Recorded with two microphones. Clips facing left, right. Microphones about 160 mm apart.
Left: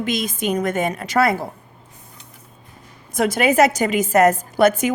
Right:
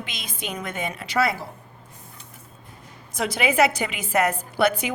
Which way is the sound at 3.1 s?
50° left (ahead or behind).